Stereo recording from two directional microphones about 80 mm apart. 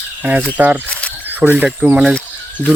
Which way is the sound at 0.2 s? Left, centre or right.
Centre.